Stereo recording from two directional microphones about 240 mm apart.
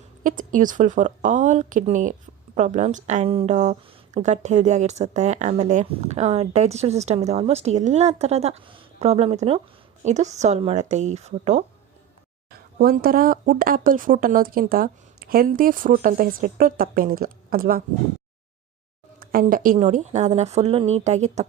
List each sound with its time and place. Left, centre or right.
0.2 s a woman's voice: right
12.8 s speech: right
19.2 s a woman's voice: right